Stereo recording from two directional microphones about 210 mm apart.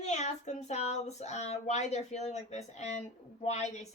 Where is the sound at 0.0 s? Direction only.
30° left (ahead or behind).